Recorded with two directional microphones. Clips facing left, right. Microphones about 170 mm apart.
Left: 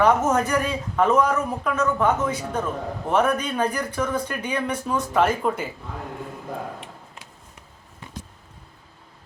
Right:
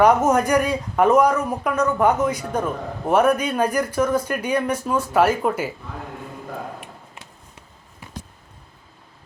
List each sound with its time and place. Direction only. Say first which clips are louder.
0.0 s speech: right 3 dB; 10° right (ahead or behind)